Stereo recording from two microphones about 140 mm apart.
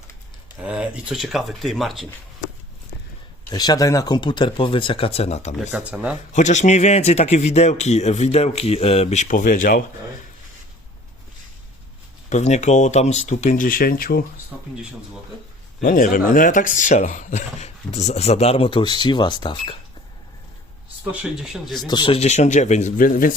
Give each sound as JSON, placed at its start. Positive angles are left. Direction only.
{"t": 0.6, "sound": "speech", "side_deg": -10}
{"t": 3.5, "sound": "speech", "side_deg": 30}
{"t": 5.7, "sound": "speech", "side_deg": -10}
{"t": 6.3, "sound": "speech", "side_deg": 60}
{"t": 12.3, "sound": "speech", "side_deg": 55}
{"t": 13.5, "sound": "speech", "side_deg": 90}
{"t": 14.5, "sound": "speech", "side_deg": -5}
{"t": 15.8, "sound": "speech", "side_deg": 75}
{"t": 21.0, "sound": "speech", "side_deg": -10}
{"t": 21.8, "sound": "a man's voice", "side_deg": 30}